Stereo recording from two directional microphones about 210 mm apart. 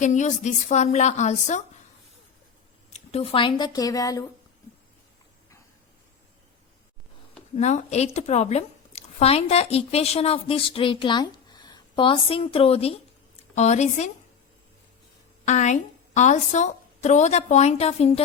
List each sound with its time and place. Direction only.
0.0 s a woman's voice: 35° left (ahead or behind)
2.9 s speech: 30° left (ahead or behind)
7.5 s a woman's voice: 35° left (ahead or behind)
15.4 s a woman's voice: 35° left (ahead or behind)